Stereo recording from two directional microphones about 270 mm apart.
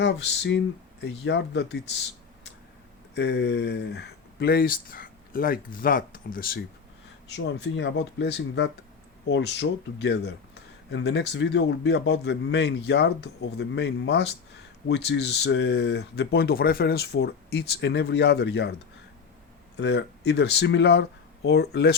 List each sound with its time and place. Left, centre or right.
0.0 s speech: left
3.2 s speech: left
19.7 s speech: left